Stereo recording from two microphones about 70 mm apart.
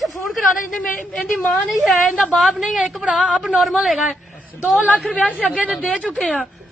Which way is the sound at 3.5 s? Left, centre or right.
Centre.